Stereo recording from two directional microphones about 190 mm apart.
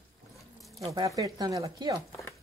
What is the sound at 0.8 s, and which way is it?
Speech, 15° right (ahead or behind).